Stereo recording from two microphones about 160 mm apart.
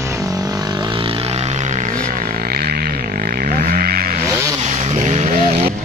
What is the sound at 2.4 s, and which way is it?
Music, 70° right (ahead or behind).